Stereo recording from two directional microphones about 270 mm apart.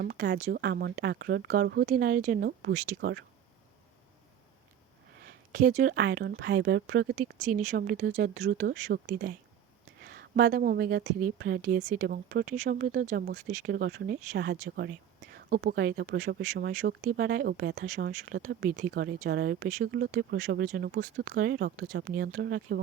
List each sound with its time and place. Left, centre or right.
0.0 s speech: right
5.2 s speech: right